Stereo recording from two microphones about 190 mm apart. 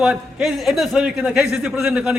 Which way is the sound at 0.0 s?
5° right (ahead or behind).